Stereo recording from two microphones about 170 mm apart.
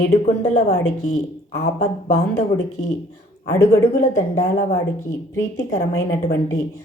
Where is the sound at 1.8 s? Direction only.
40° left (ahead or behind).